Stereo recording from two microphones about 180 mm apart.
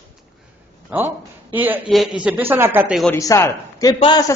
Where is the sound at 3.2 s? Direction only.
15° left (ahead or behind).